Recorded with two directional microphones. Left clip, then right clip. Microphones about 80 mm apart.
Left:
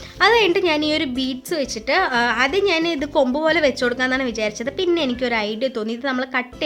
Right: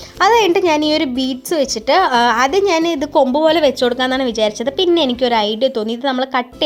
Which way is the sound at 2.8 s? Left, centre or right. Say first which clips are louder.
Right 4 dB; right.